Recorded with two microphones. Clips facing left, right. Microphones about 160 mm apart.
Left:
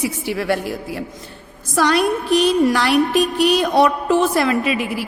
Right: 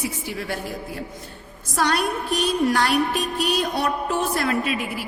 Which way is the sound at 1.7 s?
90° left.